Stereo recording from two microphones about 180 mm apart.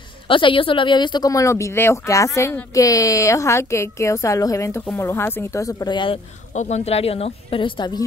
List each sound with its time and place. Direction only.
0.3 s speech: 30° left (ahead or behind)
6.5 s a woman's voice: 40° left (ahead or behind)